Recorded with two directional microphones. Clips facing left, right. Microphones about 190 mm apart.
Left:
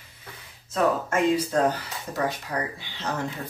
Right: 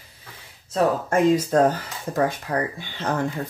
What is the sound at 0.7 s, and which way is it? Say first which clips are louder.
Speech: right 3 dB; 45° right (ahead or behind).